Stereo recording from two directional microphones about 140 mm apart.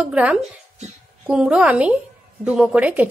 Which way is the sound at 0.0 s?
10° right (ahead or behind).